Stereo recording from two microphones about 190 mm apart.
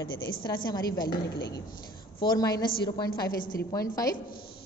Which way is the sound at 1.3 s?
60° left (ahead or behind).